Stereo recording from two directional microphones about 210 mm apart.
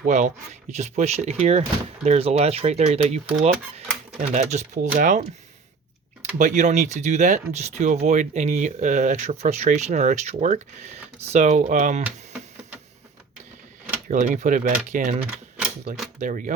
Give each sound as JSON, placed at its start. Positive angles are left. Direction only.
{"t": 0.0, "sound": "speech", "side_deg": -35}
{"t": 6.4, "sound": "speech", "side_deg": -35}
{"t": 14.1, "sound": "speech", "side_deg": -35}
{"t": 16.2, "sound": "speech", "side_deg": -40}